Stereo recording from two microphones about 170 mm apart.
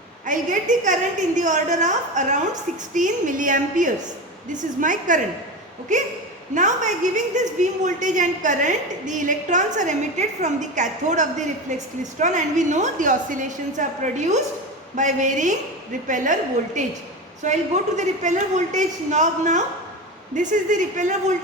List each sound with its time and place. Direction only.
0.3 s a woman's voice: 50° right (ahead or behind)